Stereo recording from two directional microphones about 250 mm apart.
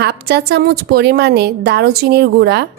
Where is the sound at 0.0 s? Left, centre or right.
Right.